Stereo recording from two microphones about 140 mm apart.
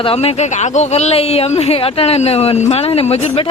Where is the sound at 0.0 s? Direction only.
45° left (ahead or behind).